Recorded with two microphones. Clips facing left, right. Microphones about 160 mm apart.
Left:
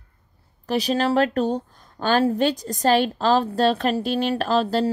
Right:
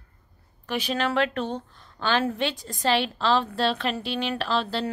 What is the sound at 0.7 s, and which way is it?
A woman's voice, 35° left (ahead or behind).